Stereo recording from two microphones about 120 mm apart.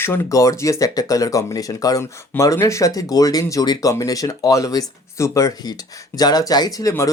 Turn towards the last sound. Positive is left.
turn(degrees=30)  # may be behind; listen again after turning